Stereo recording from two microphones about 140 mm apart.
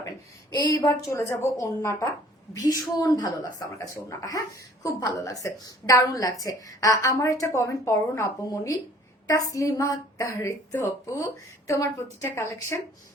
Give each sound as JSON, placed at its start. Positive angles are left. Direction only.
{"t": 0.5, "sound": "speech", "side_deg": 30}